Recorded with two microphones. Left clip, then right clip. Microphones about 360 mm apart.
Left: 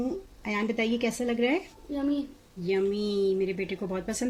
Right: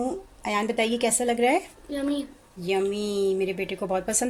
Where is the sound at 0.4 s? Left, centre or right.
Right.